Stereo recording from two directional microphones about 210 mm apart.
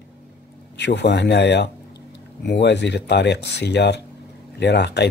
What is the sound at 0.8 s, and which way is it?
Speech, 55° left (ahead or behind).